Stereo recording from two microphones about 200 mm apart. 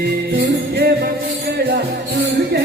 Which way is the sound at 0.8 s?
50° right (ahead or behind).